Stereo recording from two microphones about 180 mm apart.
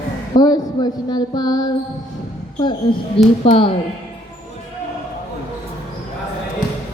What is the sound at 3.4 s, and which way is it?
Speech, 30° left (ahead or behind).